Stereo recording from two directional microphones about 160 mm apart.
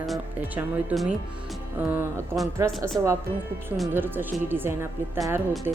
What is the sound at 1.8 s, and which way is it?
Speech, 15° right (ahead or behind).